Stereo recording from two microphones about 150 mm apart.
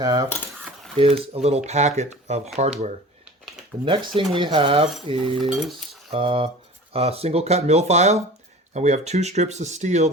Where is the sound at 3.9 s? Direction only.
35° right (ahead or behind).